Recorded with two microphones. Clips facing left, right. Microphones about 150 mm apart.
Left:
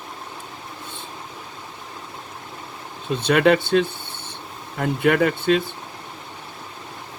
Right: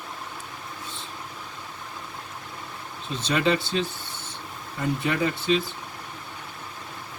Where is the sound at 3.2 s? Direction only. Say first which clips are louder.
Left 7 dB; 60° left (ahead or behind).